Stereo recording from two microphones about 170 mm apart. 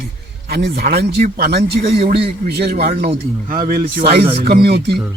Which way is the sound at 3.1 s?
50° right (ahead or behind).